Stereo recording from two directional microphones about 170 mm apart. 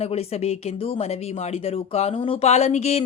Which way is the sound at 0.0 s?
35° left (ahead or behind).